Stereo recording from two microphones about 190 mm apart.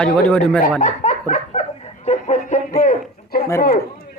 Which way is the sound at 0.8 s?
40° left (ahead or behind).